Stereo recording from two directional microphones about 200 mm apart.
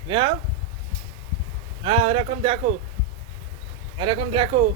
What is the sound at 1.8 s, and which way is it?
Speech, 30° right (ahead or behind).